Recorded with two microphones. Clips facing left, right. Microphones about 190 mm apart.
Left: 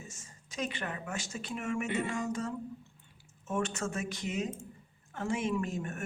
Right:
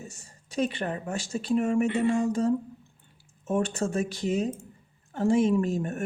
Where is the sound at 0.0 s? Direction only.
35° right (ahead or behind).